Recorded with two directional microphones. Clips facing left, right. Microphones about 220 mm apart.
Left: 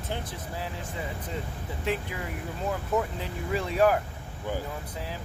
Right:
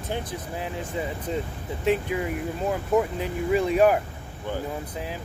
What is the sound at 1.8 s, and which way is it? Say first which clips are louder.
Speech: right 8 dB; 20° right (ahead or behind).